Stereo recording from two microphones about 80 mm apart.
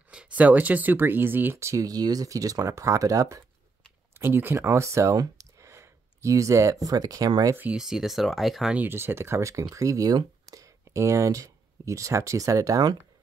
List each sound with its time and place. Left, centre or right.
0.1 s speech: centre; by 3.4 s right
4.2 s speech: right
4.6 s speech: right
7.7 s speech: centre
8.7 s speech: right